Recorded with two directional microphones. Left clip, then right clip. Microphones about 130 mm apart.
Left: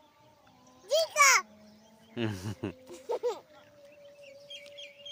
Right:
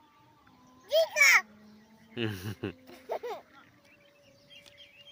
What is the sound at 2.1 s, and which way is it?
Speech, 40° left (ahead or behind).